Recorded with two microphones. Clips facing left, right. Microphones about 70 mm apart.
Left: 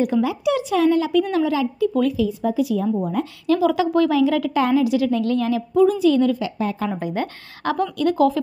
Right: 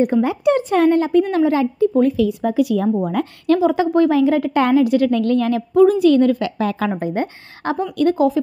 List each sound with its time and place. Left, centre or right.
0.0 s a woman's voice: right
2.1 s speech: right
3.5 s a woman's voice: right
4.6 s a woman's voice: right
6.6 s a woman's voice: right
6.9 s a woman's voice: right
8.0 s a woman's voice: right